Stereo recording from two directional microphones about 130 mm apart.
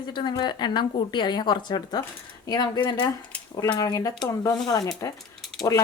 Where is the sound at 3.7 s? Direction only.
25° left (ahead or behind).